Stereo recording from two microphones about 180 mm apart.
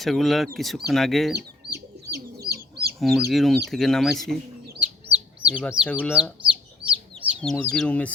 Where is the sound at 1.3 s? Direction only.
65° right (ahead or behind).